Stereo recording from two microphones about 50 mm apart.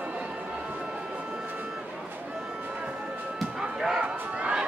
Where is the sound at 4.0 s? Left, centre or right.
Right.